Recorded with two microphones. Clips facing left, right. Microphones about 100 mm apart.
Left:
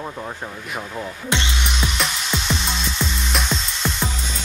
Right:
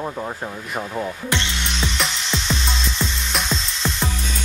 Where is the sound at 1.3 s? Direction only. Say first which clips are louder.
Left 1 dB; 15° left (ahead or behind).